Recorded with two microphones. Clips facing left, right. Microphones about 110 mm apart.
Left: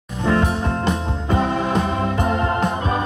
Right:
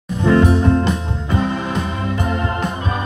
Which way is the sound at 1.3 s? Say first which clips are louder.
Left 1 dB; 40° left (ahead or behind).